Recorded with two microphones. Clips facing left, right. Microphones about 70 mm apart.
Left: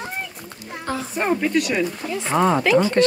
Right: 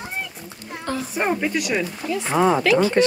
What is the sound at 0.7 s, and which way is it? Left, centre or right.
Speech, centre.